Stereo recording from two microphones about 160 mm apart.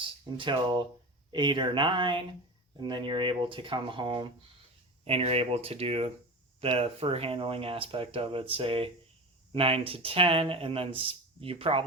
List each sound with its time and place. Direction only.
0.0 s speech: 30° right (ahead or behind)